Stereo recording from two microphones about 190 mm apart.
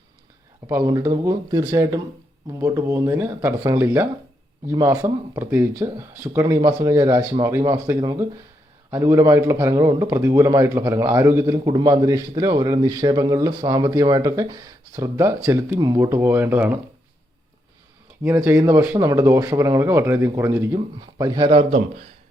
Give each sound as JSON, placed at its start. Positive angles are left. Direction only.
{"t": 0.7, "sound": "a man's voice", "side_deg": -15}
{"t": 18.2, "sound": "a man's voice", "side_deg": -15}